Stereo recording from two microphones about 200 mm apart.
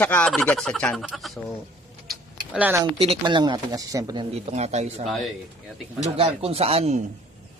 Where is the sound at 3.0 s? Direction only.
25° right (ahead or behind).